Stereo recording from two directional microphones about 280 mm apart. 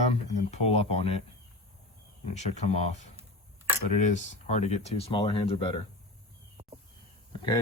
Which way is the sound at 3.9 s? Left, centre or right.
Left.